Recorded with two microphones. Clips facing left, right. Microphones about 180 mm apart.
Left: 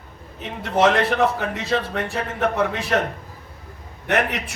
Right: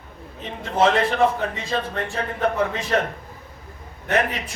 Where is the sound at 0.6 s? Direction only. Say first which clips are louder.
Left 1 dB; 70° left (ahead or behind).